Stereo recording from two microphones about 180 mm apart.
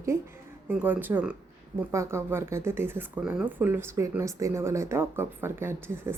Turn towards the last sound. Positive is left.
turn(degrees=-15)  # may be behind; listen again after turning